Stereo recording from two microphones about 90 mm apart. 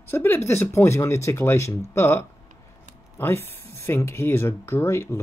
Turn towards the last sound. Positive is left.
turn(degrees=30)  # may be behind; listen again after turning